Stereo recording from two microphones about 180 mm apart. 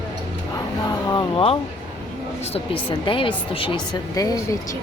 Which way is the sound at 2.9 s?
30° left (ahead or behind).